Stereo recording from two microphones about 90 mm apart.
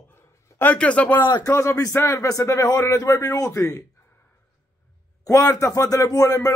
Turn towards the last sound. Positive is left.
turn(degrees=40)  # may be behind; listen again after turning